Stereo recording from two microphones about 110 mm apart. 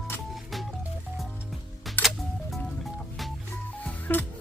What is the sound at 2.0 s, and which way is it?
Music, centre (ahead or behind).